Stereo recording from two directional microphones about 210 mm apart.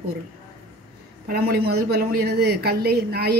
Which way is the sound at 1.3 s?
50° right (ahead or behind).